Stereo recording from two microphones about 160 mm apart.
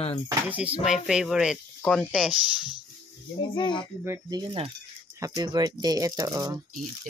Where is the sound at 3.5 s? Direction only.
30° left (ahead or behind).